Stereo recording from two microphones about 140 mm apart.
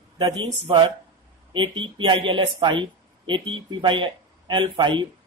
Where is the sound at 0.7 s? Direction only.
35° right (ahead or behind).